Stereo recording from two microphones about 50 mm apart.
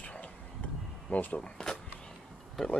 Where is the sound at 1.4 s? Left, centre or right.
Centre.